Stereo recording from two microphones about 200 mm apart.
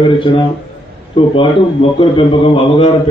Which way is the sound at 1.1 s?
25° left (ahead or behind).